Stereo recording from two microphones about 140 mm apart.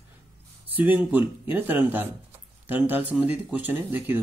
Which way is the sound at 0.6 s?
15° right (ahead or behind).